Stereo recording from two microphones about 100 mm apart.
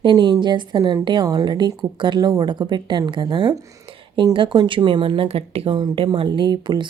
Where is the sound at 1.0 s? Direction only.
50° right (ahead or behind).